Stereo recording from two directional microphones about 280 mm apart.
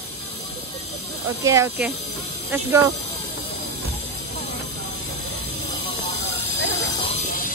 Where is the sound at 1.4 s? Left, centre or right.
Centre.